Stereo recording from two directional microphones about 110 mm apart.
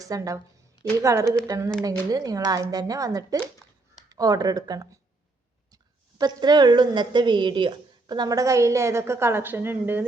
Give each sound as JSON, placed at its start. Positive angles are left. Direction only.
{"t": 0.0, "sound": "a woman's voice", "side_deg": -30}